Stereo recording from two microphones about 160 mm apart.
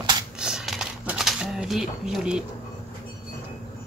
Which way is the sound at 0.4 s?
5° right (ahead or behind).